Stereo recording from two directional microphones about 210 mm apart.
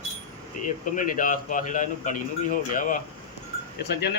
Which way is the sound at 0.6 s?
40° left (ahead or behind).